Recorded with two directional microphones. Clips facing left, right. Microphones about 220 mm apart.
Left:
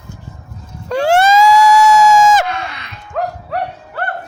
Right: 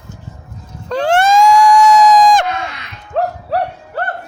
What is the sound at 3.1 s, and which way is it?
Dog, 40° right (ahead or behind).